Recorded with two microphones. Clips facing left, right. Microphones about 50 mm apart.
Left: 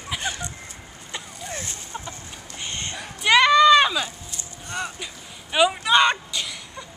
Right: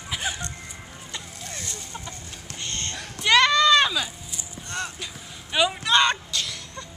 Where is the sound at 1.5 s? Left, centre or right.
Left.